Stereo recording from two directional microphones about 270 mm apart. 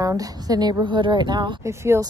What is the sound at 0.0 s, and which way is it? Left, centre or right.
A woman's voice, centre.